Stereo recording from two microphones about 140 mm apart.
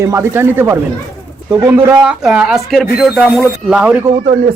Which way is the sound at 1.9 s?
5° right (ahead or behind).